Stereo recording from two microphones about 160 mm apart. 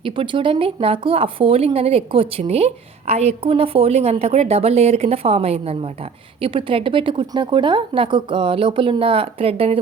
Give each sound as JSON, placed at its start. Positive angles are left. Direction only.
{"t": 0.0, "sound": "a woman's voice", "side_deg": -35}